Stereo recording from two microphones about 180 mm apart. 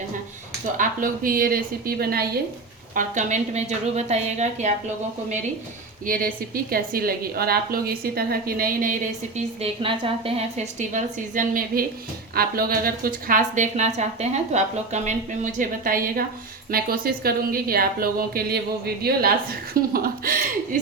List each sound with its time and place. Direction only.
0.8 s a woman's voice: 50° right (ahead or behind)
2.9 s a woman's voice: 45° right (ahead or behind)
6.1 s a woman's voice: 50° right (ahead or behind)